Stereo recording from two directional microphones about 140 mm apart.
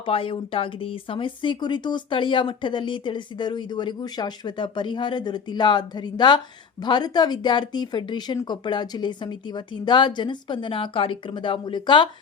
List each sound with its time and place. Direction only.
0.0 s speech: 40° left (ahead or behind)